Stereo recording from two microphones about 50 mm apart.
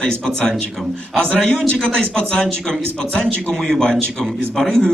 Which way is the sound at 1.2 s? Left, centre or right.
Centre.